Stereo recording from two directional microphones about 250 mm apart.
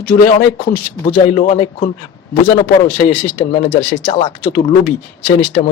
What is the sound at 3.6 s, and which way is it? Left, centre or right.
Speech, left.